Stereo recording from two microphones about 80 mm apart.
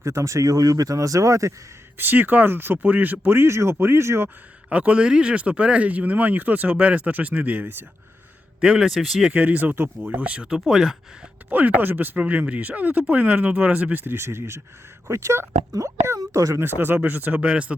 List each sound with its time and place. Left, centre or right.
0.0 s speech: right
2.0 s speech: right
4.7 s speech: centre
8.6 s a man's voice: centre
9.3 s speech: centre
11.4 s speech: right
16.6 s speech: right